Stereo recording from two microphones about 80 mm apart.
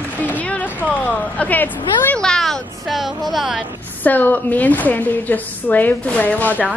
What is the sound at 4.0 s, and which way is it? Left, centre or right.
A woman's voice, left.